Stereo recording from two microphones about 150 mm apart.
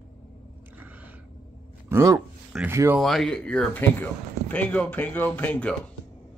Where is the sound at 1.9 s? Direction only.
15° right (ahead or behind).